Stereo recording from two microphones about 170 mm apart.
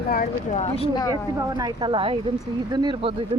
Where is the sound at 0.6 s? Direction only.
35° left (ahead or behind).